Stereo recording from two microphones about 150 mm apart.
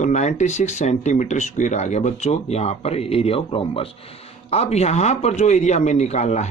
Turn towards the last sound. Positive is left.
turn(degrees=50)  # may be behind; listen again after turning